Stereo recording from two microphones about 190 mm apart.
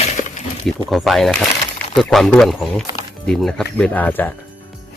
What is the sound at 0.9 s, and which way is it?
A man's voice, centre (ahead or behind).